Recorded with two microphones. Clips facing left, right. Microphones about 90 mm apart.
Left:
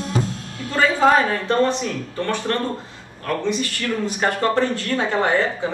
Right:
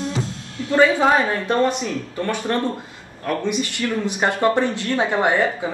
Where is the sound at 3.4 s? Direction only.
15° right (ahead or behind).